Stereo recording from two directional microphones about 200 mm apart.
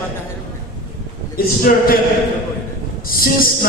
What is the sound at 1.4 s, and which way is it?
Speech, 45° left (ahead or behind).